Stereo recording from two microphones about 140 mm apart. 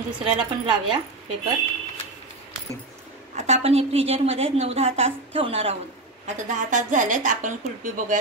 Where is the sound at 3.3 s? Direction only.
50° right (ahead or behind).